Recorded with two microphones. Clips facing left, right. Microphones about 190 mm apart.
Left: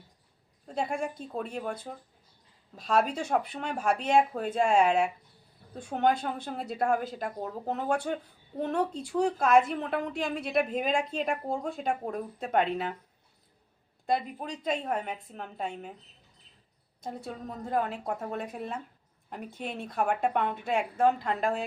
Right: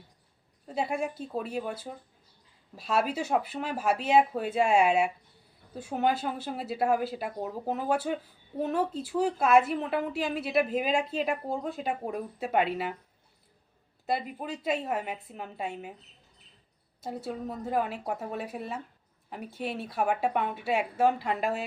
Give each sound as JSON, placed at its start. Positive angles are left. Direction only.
{"t": 0.7, "sound": "a woman's voice", "side_deg": -5}
{"t": 14.1, "sound": "speech", "side_deg": -5}
{"t": 17.0, "sound": "speech", "side_deg": -5}